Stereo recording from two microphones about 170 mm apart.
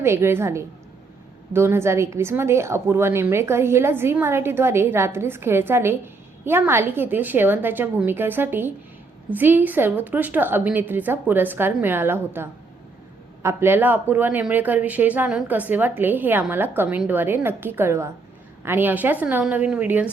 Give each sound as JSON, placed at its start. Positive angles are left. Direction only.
{"t": 0.0, "sound": "speech", "side_deg": -15}